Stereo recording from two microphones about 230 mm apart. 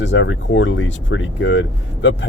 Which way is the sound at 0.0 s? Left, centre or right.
Left.